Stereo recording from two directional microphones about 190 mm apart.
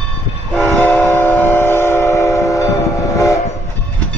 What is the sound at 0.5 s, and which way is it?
Train, 10° left (ahead or behind).